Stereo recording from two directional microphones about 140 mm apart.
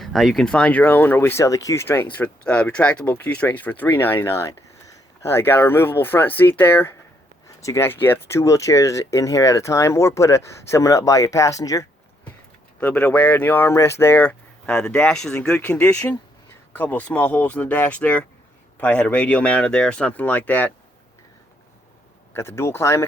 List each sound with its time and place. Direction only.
0.0 s speech: centre (ahead or behind); by 11.9 s 25° left (ahead or behind)
12.8 s speech: 10° left (ahead or behind)
22.4 s speech: 20° left (ahead or behind)